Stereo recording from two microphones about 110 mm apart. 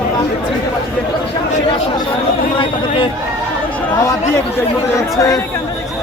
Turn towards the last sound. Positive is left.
turn(degrees=30)  # may be behind; listen again after turning